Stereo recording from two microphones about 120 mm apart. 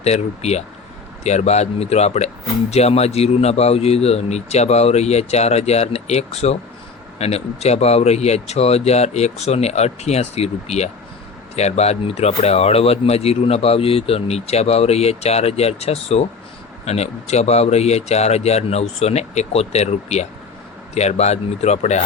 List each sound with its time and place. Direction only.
0.0 s speech: 65° left (ahead or behind)